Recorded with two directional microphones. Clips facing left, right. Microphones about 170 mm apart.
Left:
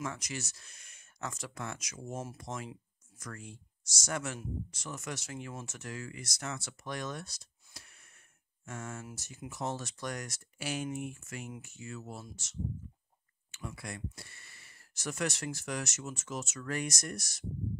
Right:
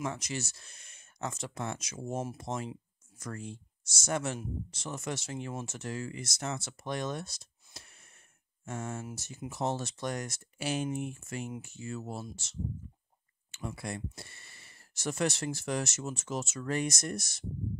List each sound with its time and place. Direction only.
0.0 s speech: 25° right (ahead or behind)